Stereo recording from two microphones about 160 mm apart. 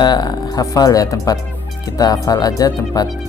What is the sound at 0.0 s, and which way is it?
Speech, 25° left (ahead or behind).